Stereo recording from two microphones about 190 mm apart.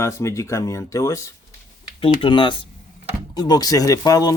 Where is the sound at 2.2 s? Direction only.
25° left (ahead or behind).